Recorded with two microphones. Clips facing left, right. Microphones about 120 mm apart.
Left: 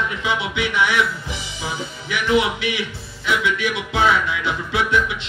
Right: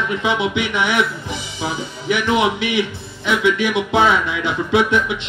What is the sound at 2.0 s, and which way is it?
Speech, 20° right (ahead or behind).